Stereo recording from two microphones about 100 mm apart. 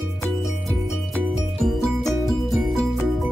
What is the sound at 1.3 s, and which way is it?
Music, centre (ahead or behind).